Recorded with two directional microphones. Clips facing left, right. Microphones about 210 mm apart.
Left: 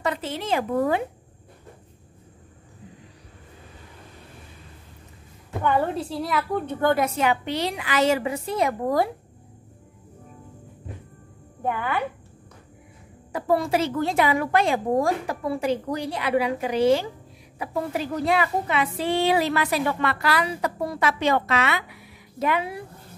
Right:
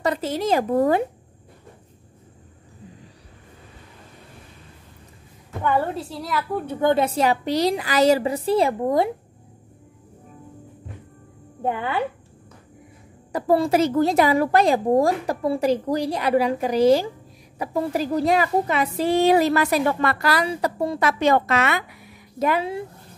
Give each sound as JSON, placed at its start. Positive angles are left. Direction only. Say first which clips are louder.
{"t": 0.0, "sound": "a woman's voice", "louder": "right 5 dB", "side_deg": -40}
{"t": 5.6, "sound": "a woman's voice", "louder": "even", "side_deg": -5}
{"t": 7.0, "sound": "a woman's voice", "louder": "right 3 dB", "side_deg": -35}
{"t": 11.6, "sound": "speech", "louder": "right 2 dB", "side_deg": -25}
{"t": 13.3, "sound": "a woman's voice", "louder": "right 3 dB", "side_deg": -35}
{"t": 21.0, "sound": "a woman's voice", "louder": "right 3 dB", "side_deg": -40}